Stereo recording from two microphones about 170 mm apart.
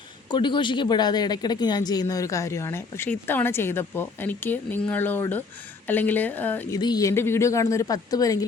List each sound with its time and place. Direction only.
0.3 s a woman's voice: 25° left (ahead or behind); by 6.7 s 10° left (ahead or behind)
6.7 s speech: 25° left (ahead or behind)